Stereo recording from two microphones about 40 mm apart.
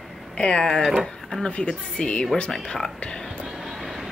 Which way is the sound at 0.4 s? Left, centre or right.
Left.